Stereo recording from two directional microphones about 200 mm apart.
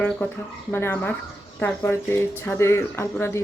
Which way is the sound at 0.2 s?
10° left (ahead or behind).